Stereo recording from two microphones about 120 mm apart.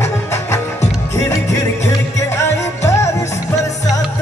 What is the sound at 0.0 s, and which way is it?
Music, 20° left (ahead or behind).